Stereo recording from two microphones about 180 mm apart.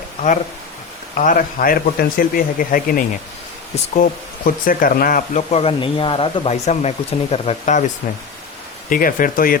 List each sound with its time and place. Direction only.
1.1 s a man's voice: 45° left (ahead or behind)
8.9 s a man's voice: 50° left (ahead or behind)